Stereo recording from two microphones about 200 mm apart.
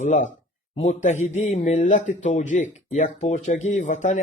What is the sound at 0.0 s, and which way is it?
Speech, 35° left (ahead or behind).